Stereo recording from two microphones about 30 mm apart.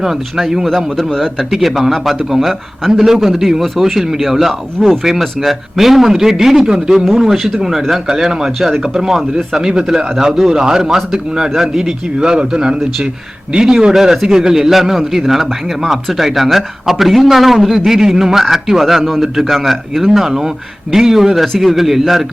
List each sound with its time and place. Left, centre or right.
0.0 s a man's voice: centre
1.1 s speech: centre
1.5 s speech: centre
2.9 s a man's voice: centre
7.3 s a man's voice: centre
12.2 s a man's voice: right; by 17.7 s centre
17.7 s a man's voice: centre
20.1 s a man's voice: centre